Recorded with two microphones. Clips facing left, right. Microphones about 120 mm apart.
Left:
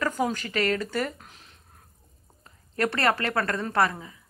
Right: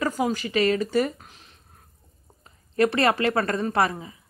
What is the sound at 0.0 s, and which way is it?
Speech, 10° right (ahead or behind).